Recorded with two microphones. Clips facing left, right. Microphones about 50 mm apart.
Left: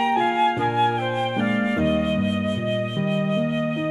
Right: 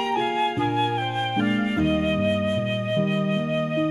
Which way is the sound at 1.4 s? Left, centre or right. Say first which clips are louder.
Left 1 dB; centre.